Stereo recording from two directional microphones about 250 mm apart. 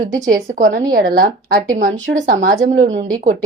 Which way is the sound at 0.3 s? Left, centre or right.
Right.